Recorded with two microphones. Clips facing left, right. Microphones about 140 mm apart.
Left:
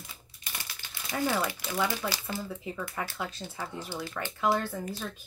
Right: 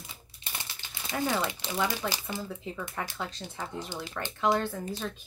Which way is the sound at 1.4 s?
25° right (ahead or behind).